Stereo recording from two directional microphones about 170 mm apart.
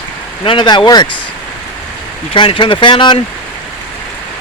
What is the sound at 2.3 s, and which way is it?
Speech, 30° left (ahead or behind).